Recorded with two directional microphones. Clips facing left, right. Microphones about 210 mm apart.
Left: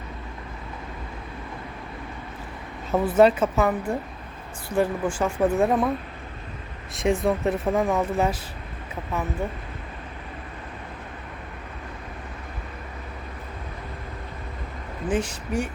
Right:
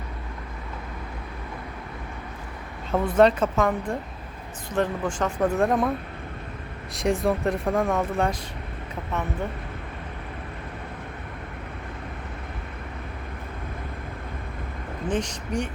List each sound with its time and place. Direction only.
2.9 s speech: 5° left (ahead or behind)
6.9 s speech: centre (ahead or behind)
15.0 s speech: 5° left (ahead or behind)